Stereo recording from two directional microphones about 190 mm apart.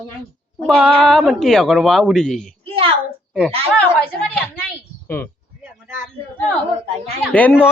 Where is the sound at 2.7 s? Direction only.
30° right (ahead or behind).